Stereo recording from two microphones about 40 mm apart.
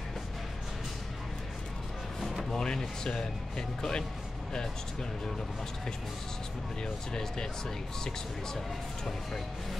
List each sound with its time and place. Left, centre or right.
2.1 s music: centre
2.5 s speech: centre
6.8 s speech: centre
8.5 s speech: centre